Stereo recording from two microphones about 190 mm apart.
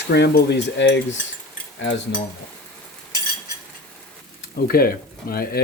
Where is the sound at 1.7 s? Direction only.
80° left.